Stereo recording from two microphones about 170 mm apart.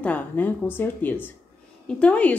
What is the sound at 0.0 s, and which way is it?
Speech, 10° left (ahead or behind).